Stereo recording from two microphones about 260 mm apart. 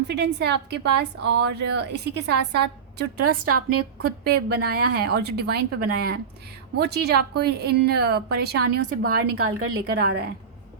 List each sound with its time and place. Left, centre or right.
0.3 s speech: right
3.2 s a woman's voice: right
4.0 s speech: right
9.0 s a woman's voice: right
10.0 s speech: right